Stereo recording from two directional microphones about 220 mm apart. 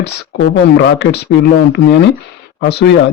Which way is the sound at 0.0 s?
50° left (ahead or behind).